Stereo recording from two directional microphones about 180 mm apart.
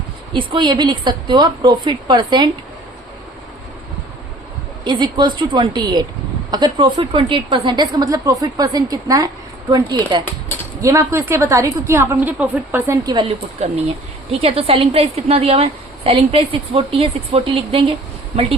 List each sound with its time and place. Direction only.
0.3 s a woman's voice: 25° right (ahead or behind)
4.8 s a woman's voice: 25° right (ahead or behind)
13.6 s a woman's voice: 40° right (ahead or behind)